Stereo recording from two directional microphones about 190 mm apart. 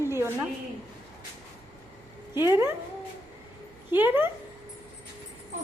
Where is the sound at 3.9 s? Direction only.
10° right (ahead or behind).